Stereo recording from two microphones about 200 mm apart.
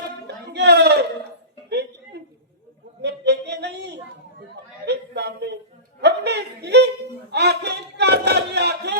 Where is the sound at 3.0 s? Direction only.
55° right (ahead or behind).